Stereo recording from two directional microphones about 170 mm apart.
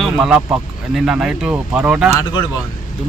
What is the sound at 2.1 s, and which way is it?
Speech, 25° left (ahead or behind).